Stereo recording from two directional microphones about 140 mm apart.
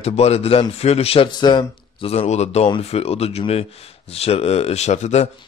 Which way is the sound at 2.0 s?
50° left (ahead or behind).